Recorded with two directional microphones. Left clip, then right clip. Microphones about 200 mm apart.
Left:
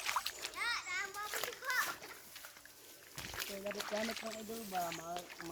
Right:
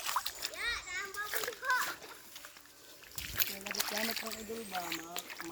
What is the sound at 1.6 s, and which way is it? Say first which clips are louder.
Splash: right 6 dB; 40° left (ahead or behind).